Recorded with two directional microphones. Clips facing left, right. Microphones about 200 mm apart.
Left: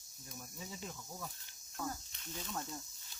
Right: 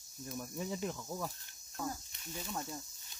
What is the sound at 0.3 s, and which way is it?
Speech, 65° right (ahead or behind).